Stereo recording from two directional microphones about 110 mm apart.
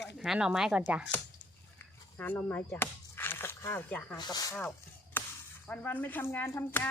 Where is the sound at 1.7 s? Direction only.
15° left (ahead or behind).